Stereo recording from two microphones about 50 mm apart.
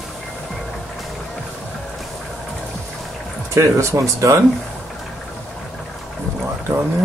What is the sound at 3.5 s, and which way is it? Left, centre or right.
Speech, right.